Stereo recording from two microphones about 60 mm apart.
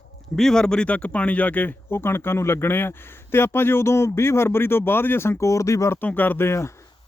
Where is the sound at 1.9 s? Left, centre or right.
Left.